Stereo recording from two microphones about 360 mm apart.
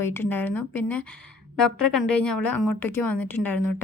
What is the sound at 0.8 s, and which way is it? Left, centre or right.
A woman's voice, left.